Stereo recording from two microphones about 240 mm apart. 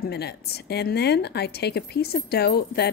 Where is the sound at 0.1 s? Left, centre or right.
Left.